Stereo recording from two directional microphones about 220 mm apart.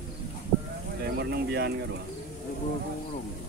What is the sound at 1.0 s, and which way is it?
Speech, 50° right (ahead or behind).